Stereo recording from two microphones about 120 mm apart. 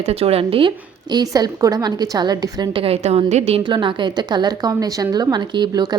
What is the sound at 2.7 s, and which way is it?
Speech, 55° right (ahead or behind).